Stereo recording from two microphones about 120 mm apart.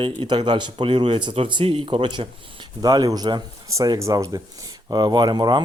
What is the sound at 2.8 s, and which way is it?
Speech, 30° right (ahead or behind).